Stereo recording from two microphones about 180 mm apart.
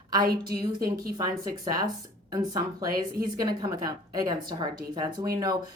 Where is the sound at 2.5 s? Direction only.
20° right (ahead or behind).